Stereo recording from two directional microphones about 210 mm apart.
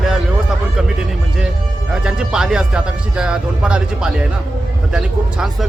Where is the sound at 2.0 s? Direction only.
5° right (ahead or behind).